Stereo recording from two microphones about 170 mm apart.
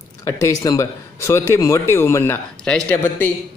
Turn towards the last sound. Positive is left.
turn(degrees=15)  # may be behind; listen again after turning